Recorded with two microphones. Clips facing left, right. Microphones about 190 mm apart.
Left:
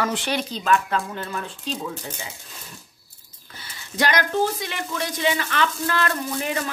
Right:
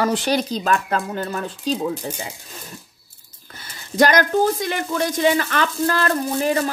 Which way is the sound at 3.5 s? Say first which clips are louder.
Right 5 dB; 45° right (ahead or behind).